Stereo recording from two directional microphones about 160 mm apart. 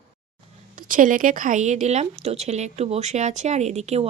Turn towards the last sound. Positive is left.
turn(degrees=-45)  # may be behind; listen again after turning